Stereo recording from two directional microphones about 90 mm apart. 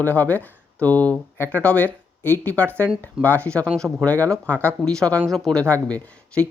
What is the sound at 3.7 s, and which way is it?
Speech, 5° left (ahead or behind).